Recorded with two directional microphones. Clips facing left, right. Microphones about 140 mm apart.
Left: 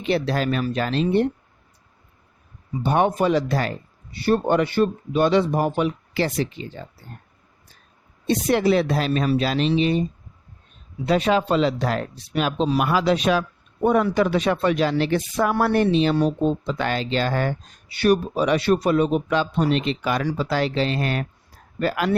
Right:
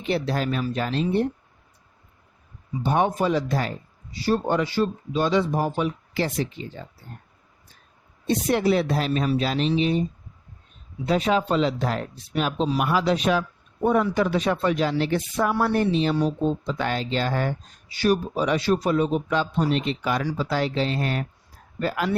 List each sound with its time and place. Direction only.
0.0 s speech: 80° left
2.8 s speech: 65° left (ahead or behind)
8.3 s speech: 90° left
11.0 s speech: 80° left
13.8 s speech: 75° left (ahead or behind)